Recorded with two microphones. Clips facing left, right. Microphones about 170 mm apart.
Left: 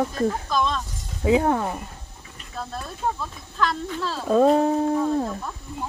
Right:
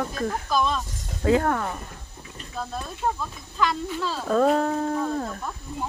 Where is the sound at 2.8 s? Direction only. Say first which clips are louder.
Left 1 dB; centre (ahead or behind).